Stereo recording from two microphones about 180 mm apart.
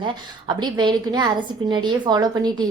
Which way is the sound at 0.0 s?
25° right (ahead or behind).